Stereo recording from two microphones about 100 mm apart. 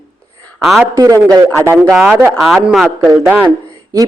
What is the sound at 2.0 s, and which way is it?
Speech, 20° right (ahead or behind).